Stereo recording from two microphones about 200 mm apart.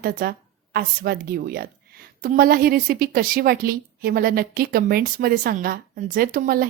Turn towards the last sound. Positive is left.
turn(degrees=-45)  # may be behind; listen again after turning